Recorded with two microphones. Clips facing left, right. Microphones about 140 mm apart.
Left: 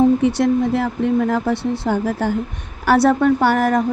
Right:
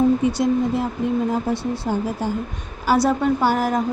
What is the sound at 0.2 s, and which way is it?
Speech, 70° left (ahead or behind).